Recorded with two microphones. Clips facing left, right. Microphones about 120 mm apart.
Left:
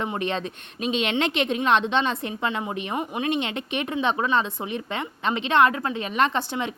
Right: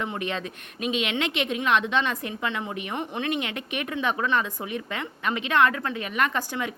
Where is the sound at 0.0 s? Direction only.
30° left (ahead or behind).